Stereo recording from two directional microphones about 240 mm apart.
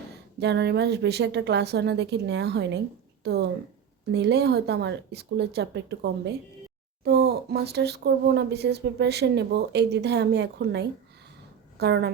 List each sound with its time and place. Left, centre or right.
0.3 s speech: right